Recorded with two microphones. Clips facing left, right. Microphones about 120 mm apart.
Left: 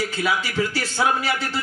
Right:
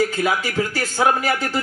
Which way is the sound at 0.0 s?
45° right (ahead or behind).